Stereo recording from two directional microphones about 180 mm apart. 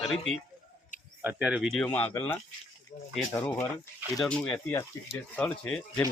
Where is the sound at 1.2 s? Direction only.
10° right (ahead or behind).